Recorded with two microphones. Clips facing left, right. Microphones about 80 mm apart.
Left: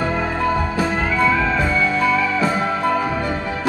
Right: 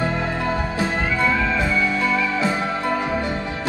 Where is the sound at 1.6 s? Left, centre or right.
Left.